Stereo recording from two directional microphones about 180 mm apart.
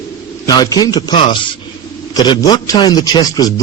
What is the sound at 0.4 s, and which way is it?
A man's voice, 20° left (ahead or behind).